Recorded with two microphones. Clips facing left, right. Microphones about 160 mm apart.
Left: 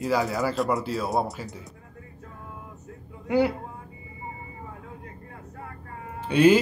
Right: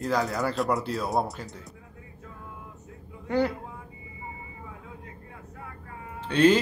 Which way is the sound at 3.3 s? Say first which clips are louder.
Left 3 dB; 10° left (ahead or behind).